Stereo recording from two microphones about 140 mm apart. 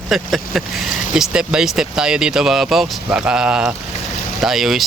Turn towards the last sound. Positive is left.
turn(degrees=0)  # may be behind; listen again after turning